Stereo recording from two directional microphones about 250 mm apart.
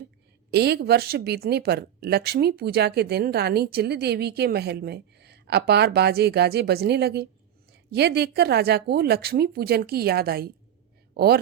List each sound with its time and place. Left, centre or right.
0.5 s speech: right